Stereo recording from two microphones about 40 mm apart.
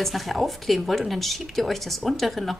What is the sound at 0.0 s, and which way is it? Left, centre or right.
Speech, centre.